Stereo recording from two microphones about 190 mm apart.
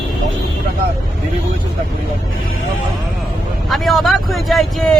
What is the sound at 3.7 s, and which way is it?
Speech, centre (ahead or behind).